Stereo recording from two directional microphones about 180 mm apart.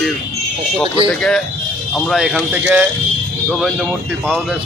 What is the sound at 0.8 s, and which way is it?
Speech, 30° right (ahead or behind).